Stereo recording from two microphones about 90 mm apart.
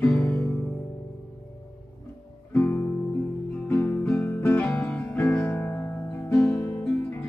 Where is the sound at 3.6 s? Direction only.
20° left (ahead or behind).